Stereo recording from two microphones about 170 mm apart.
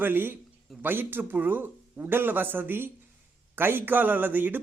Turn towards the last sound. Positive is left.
turn(degrees=-10)  # may be behind; listen again after turning